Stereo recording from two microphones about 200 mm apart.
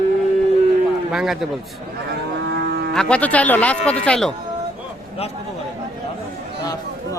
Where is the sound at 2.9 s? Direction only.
5° left (ahead or behind).